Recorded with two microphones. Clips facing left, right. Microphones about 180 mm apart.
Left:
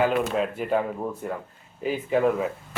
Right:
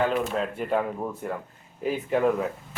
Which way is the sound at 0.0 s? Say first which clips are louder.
Left 2 dB; 5° left (ahead or behind).